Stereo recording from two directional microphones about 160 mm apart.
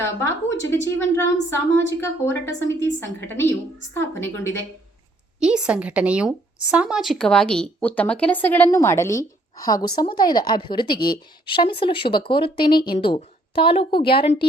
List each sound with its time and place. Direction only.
0.0 s speech: 15° left (ahead or behind)
5.4 s a woman's voice: 5° right (ahead or behind); by 14.4 s 35° left (ahead or behind)